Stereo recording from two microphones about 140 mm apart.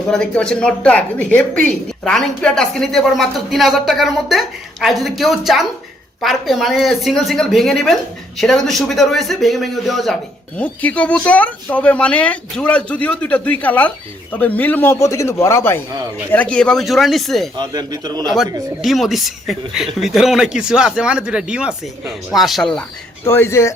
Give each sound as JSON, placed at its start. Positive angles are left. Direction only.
{"t": 0.1, "sound": "a woman's voice", "side_deg": 5}
{"t": 17.6, "sound": "speech", "side_deg": -30}
{"t": 18.8, "sound": "a woman's voice", "side_deg": 0}
{"t": 23.2, "sound": "speech", "side_deg": 15}